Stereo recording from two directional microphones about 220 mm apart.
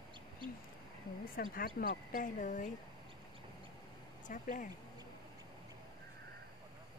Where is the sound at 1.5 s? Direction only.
40° left (ahead or behind).